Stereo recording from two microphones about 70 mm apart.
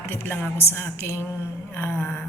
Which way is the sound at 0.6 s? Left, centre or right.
Left.